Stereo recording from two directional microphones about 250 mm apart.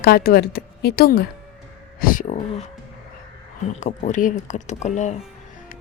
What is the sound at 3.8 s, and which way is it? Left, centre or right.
A woman's voice, left.